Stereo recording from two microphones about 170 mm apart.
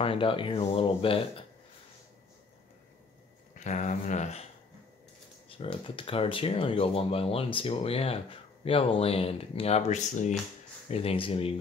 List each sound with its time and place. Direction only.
0.0 s speech: 30° left (ahead or behind)
3.5 s speech: 45° left (ahead or behind)
5.6 s speech: 30° left (ahead or behind)